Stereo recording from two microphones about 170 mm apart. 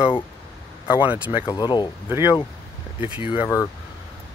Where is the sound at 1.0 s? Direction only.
10° right (ahead or behind).